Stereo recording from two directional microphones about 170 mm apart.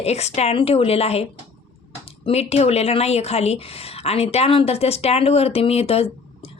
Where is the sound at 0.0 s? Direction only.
40° left (ahead or behind).